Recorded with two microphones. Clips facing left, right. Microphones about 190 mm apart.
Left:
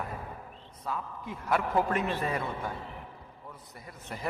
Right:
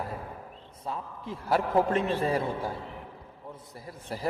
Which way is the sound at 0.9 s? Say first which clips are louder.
Right 1 dB; 30° right (ahead or behind).